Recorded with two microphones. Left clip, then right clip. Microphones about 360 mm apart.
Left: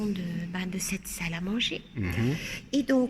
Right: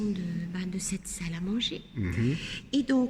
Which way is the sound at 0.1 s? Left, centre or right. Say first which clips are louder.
Left 1 dB; centre.